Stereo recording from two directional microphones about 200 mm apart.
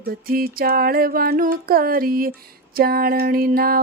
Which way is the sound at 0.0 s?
45° right (ahead or behind).